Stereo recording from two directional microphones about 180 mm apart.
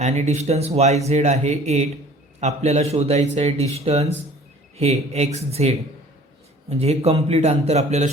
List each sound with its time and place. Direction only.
0.0 s a man's voice: 35° right (ahead or behind)